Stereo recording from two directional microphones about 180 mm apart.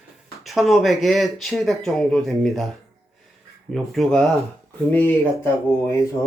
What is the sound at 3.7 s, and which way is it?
Speech, centre (ahead or behind).